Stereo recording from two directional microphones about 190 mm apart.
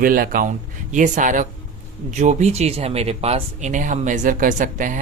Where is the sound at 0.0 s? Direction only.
50° right (ahead or behind).